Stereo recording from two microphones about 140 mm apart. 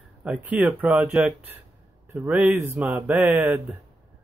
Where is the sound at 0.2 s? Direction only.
10° right (ahead or behind).